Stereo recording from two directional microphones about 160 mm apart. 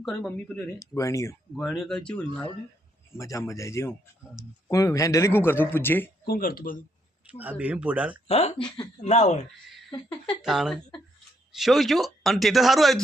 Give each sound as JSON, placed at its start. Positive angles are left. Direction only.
{"t": 0.0, "sound": "speech", "side_deg": 0}
{"t": 0.8, "sound": "speech", "side_deg": 20}
{"t": 1.5, "sound": "speech", "side_deg": 0}
{"t": 3.2, "sound": "speech", "side_deg": 20}
{"t": 6.2, "sound": "speech", "side_deg": 65}
{"t": 7.3, "sound": "speech", "side_deg": -10}
{"t": 8.3, "sound": "speech", "side_deg": 40}
{"t": 9.0, "sound": "speech", "side_deg": 45}
{"t": 10.4, "sound": "speech", "side_deg": 0}